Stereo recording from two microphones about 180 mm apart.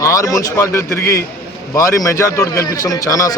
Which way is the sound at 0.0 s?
20° left (ahead or behind).